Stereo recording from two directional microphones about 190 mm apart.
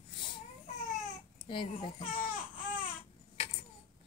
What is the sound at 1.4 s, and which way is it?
Speech, 25° left (ahead or behind).